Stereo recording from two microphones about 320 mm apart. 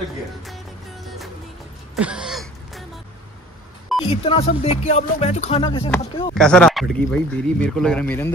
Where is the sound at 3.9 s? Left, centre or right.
Centre.